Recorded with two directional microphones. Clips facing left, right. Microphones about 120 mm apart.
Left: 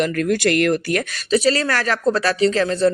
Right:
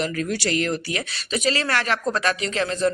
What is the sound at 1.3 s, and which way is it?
Speech, 35° left (ahead or behind).